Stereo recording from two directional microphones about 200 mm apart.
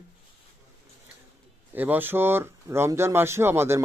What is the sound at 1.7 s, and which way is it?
Speech, 10° right (ahead or behind).